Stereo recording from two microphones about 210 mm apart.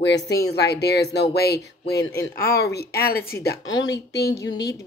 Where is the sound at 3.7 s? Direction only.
20° left (ahead or behind).